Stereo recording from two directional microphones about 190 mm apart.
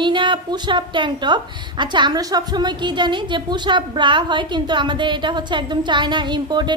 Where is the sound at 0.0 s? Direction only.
25° right (ahead or behind).